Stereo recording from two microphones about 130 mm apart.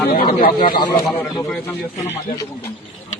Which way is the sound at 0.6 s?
35° left (ahead or behind).